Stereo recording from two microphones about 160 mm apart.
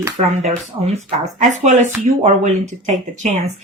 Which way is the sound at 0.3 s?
45° right (ahead or behind).